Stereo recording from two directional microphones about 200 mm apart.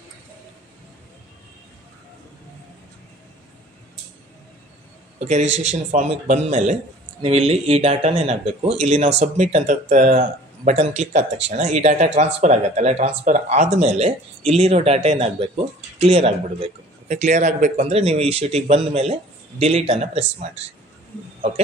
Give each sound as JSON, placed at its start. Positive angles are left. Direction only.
{"t": 5.6, "sound": "speech", "side_deg": -35}